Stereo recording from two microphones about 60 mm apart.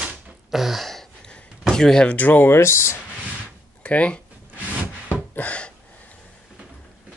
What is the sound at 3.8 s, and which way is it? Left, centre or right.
Speech, centre.